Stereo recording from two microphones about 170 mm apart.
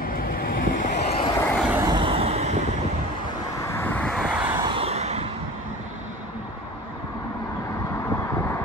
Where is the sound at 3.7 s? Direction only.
10° left (ahead or behind).